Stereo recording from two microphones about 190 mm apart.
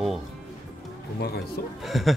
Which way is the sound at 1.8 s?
Centre (ahead or behind).